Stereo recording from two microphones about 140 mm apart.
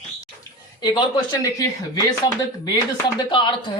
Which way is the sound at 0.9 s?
30° left (ahead or behind).